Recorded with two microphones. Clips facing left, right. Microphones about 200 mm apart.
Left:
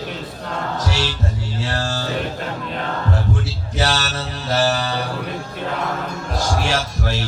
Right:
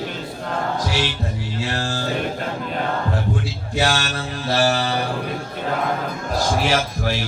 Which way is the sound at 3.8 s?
15° right (ahead or behind).